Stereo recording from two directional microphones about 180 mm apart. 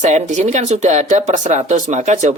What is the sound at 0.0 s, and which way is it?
Speech, 40° right (ahead or behind).